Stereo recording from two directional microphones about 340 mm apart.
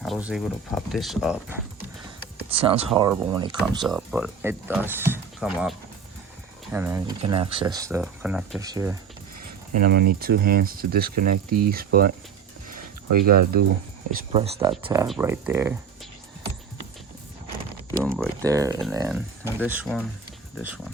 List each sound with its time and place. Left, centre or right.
0.0 s speech: centre
2.5 s speech: centre
3.8 s speech: centre
9.7 s speech: right
13.1 s speech: right
13.3 s speech: right; by 15.8 s centre
18.1 s speech: centre